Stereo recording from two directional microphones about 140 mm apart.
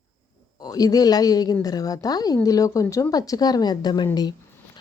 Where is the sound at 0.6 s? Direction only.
25° left (ahead or behind).